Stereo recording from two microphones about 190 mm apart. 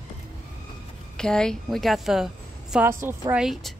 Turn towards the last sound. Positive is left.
turn(degrees=0)  # may be behind; listen again after turning